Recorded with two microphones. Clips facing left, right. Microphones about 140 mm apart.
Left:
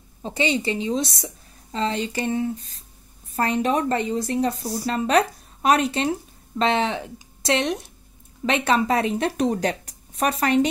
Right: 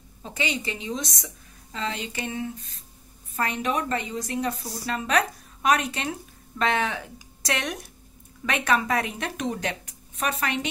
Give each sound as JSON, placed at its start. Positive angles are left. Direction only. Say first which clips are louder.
{"t": 0.2, "sound": "a woman's voice", "louder": "left 7 dB", "side_deg": 30}